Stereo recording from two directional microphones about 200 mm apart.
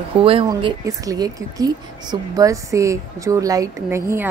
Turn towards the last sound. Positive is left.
turn(degrees=-15)  # may be behind; listen again after turning